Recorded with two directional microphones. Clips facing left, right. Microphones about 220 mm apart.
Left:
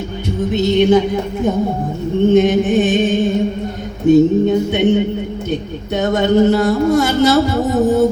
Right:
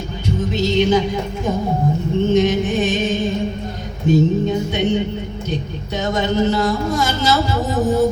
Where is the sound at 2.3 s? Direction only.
60° left (ahead or behind).